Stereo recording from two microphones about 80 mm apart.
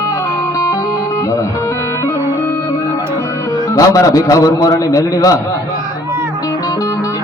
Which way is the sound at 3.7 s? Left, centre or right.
Left.